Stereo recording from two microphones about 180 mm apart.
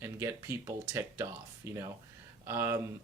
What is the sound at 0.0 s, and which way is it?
Speech, 15° right (ahead or behind).